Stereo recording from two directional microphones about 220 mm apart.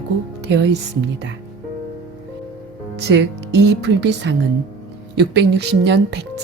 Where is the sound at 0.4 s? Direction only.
55° right (ahead or behind).